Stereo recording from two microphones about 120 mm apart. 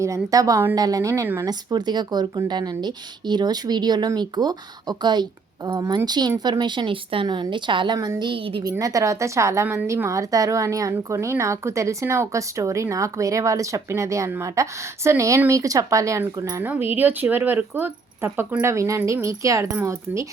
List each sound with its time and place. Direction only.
0.0 s a woman's voice: 25° right (ahead or behind)
1.5 s speech: 35° right (ahead or behind)
7.9 s speech: 30° right (ahead or behind); by 8.6 s 50° right (ahead or behind)
8.8 s a woman's voice: 30° right (ahead or behind)